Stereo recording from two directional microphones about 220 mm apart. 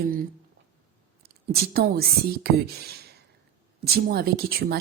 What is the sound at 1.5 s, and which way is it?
Speech, 45° right (ahead or behind).